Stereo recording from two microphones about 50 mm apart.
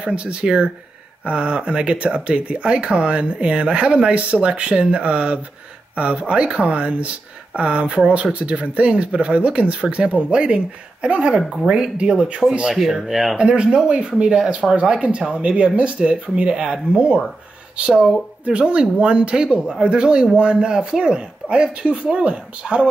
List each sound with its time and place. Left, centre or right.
0.0 s speech: right
12.7 s speech: centre
13.4 s speech: centre